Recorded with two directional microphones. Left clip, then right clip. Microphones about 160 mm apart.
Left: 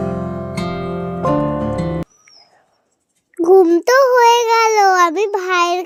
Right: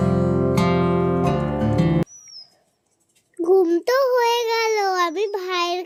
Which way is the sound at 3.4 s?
40° left (ahead or behind).